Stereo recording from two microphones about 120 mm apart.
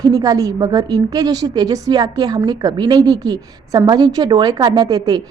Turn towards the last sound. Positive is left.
turn(degrees=-30)  # may be behind; listen again after turning